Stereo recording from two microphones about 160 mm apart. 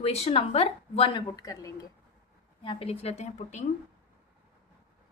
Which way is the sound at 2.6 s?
35° left (ahead or behind).